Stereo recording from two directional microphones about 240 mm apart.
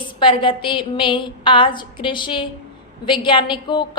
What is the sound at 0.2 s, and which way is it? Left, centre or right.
A woman's voice, left.